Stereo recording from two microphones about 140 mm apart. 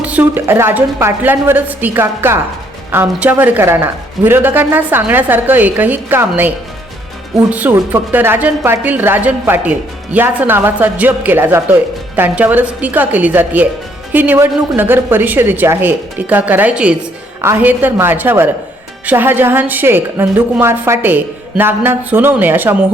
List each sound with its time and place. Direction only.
0.0 s a woman's voice: 10° right (ahead or behind)
7.5 s a woman's voice: 15° right (ahead or behind)